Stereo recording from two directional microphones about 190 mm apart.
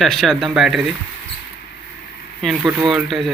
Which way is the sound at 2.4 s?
5° right (ahead or behind).